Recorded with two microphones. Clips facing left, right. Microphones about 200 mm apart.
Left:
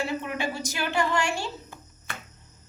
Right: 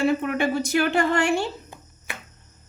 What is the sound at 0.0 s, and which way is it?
A woman's voice, 55° right (ahead or behind).